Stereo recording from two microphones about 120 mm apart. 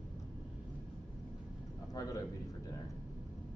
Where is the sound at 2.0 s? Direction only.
30° left (ahead or behind).